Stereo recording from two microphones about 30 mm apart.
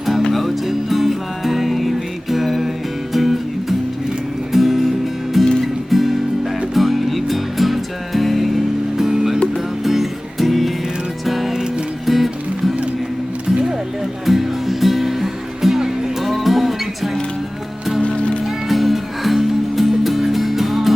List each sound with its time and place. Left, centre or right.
0.3 s music: centre
9.0 s music: centre
14.3 s music: centre
18.4 s music: centre